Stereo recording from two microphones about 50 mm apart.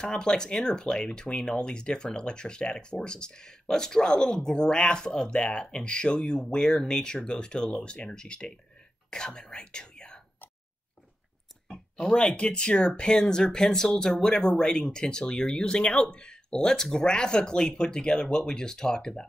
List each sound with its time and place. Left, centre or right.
0.0 s speech: centre
11.7 s speech: centre